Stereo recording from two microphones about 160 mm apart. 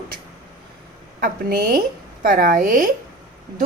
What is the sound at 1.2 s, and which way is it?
A woman's voice, 60° right (ahead or behind).